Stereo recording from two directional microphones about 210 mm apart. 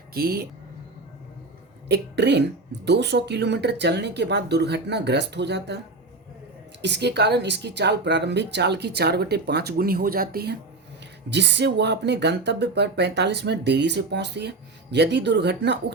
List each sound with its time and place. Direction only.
0.1 s speech: 45° right (ahead or behind)
1.9 s speech: 55° right (ahead or behind)
6.8 s speech: 55° right (ahead or behind)